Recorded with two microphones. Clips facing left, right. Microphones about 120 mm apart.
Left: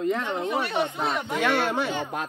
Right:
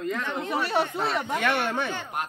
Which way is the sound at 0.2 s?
15° left (ahead or behind).